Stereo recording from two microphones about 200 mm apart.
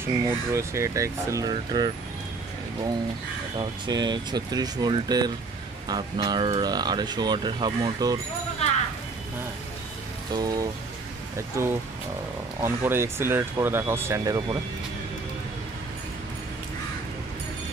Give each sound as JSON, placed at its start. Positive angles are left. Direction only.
{"t": 0.0, "sound": "speech", "side_deg": -15}
{"t": 3.5, "sound": "speech", "side_deg": -20}
{"t": 10.3, "sound": "speech", "side_deg": -20}